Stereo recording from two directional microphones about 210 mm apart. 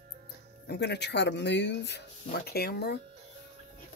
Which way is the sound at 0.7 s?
50° left (ahead or behind).